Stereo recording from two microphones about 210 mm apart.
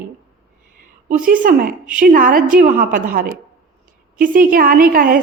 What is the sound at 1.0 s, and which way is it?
A woman's voice, 40° right (ahead or behind).